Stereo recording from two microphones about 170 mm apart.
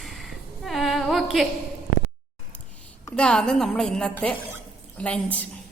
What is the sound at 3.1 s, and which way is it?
A woman's voice, 5° left (ahead or behind).